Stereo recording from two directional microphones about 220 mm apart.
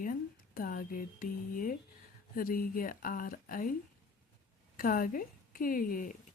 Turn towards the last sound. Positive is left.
turn(degrees=40)  # may be behind; listen again after turning